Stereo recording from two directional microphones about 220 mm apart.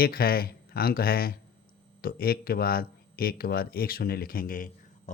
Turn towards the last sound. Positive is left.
turn(degrees=40)  # may be behind; listen again after turning